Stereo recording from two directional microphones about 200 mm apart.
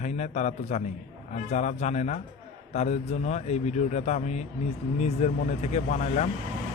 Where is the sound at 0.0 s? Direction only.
35° left (ahead or behind).